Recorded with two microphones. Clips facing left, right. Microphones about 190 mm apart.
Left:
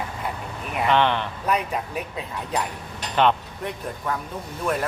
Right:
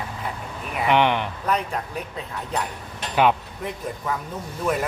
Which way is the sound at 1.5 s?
10° left (ahead or behind).